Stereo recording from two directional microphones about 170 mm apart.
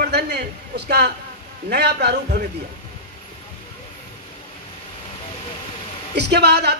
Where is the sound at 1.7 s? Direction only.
75° right (ahead or behind).